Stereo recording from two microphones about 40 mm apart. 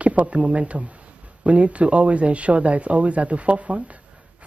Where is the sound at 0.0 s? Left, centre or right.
Right.